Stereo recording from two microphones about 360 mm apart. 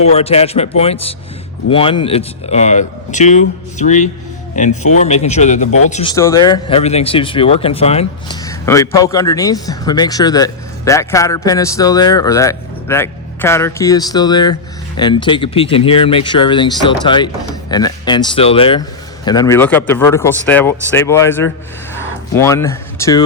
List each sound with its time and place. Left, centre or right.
0.0 s a man's voice: centre